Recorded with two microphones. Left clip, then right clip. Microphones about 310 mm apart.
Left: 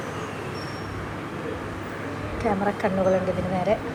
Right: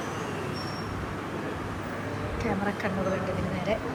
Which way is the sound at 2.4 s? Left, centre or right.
Centre.